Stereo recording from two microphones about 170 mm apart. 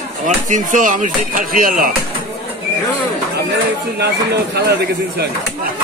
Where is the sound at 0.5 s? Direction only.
50° right (ahead or behind).